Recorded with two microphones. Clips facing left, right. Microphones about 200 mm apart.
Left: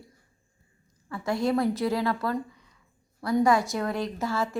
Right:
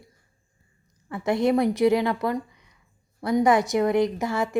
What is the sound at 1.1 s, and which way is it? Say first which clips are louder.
A woman's voice: right 4 dB; 20° right (ahead or behind).